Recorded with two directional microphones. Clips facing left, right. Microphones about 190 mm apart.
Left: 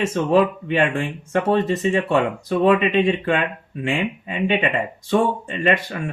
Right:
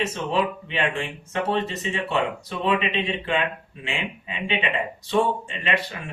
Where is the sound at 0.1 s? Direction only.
50° left (ahead or behind).